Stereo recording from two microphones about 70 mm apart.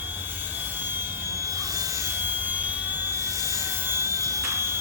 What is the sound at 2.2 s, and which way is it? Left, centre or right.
Jet engine, right.